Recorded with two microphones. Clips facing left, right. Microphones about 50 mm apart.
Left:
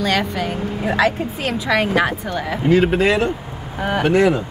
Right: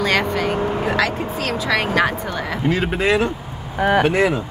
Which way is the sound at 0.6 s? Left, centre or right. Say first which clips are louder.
Right 4 dB; right.